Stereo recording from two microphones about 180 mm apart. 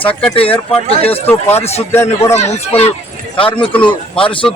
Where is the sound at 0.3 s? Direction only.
30° left (ahead or behind).